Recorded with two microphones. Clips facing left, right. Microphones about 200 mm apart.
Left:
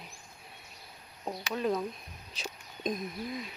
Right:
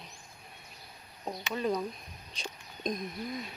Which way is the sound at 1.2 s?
Centre (ahead or behind).